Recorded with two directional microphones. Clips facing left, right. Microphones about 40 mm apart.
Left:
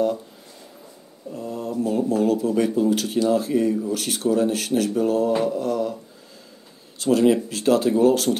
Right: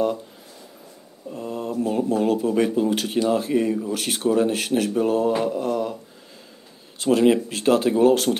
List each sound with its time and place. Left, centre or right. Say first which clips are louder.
1.4 s speech: even; right
5.6 s a sound: even; right
7.0 s speech: even; right